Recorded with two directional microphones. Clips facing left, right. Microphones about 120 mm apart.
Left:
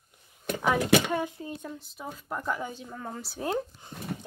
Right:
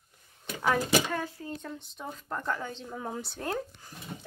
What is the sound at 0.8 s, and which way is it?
Speech, 60° left (ahead or behind).